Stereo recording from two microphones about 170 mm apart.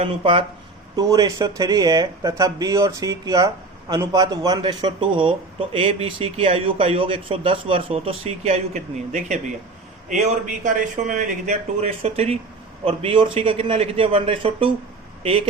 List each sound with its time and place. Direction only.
0.0 s a man's voice: 30° right (ahead or behind)
0.9 s a man's voice: 20° right (ahead or behind)